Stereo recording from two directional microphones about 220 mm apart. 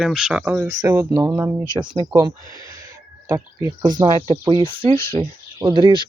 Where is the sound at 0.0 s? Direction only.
5° right (ahead or behind); by 2.3 s 20° right (ahead or behind).